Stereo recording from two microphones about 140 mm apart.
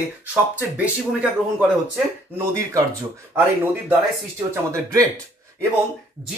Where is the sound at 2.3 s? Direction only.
20° right (ahead or behind).